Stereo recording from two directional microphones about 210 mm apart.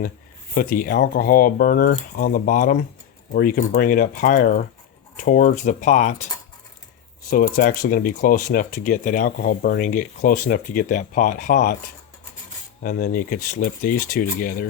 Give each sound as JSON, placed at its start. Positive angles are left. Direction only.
{"t": 0.5, "sound": "speech", "side_deg": 40}
{"t": 7.3, "sound": "speech", "side_deg": 45}
{"t": 12.8, "sound": "speech", "side_deg": 40}